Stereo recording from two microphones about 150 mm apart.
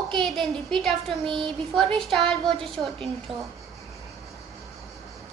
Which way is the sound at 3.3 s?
40° right (ahead or behind).